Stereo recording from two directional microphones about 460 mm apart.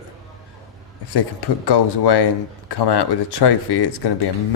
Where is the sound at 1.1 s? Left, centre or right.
Left.